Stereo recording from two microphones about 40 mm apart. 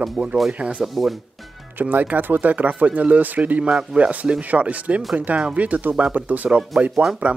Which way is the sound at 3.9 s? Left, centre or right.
Right.